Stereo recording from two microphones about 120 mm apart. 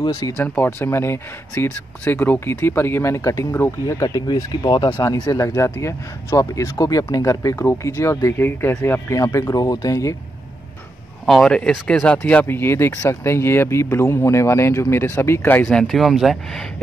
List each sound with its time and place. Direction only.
0.0 s speech: 30° left (ahead or behind)
11.2 s speech: 5° left (ahead or behind); by 15.7 s 20° left (ahead or behind)
15.7 s speech: 5° left (ahead or behind)